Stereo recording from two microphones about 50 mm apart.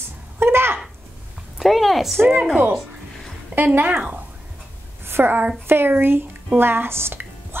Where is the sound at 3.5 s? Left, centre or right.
Right.